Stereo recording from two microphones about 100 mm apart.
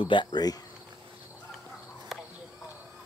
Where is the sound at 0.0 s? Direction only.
55° left (ahead or behind).